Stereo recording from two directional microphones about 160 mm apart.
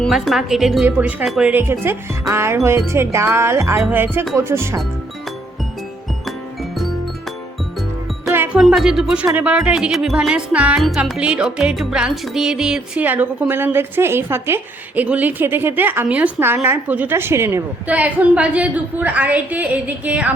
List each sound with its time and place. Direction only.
0.0 s speech: centre (ahead or behind); by 4.8 s 15° right (ahead or behind)
6.2 s music: centre (ahead or behind)
8.5 s speech: centre (ahead or behind)